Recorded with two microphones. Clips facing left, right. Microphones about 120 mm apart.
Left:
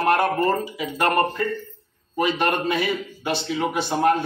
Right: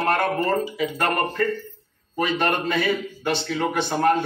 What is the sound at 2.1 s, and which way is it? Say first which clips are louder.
A man's voice: left 1 dB; 5° left (ahead or behind).